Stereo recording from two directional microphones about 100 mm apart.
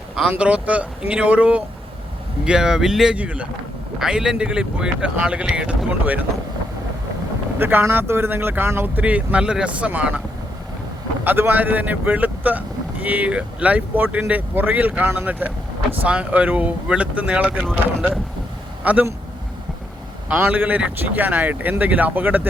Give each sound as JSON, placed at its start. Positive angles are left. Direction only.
{"t": 0.3, "sound": "speech", "side_deg": -10}
{"t": 7.6, "sound": "speech", "side_deg": -20}
{"t": 11.2, "sound": "speech", "side_deg": -20}
{"t": 17.6, "sound": "speech", "side_deg": 0}
{"t": 18.8, "sound": "speech", "side_deg": -15}
{"t": 20.2, "sound": "speech", "side_deg": -15}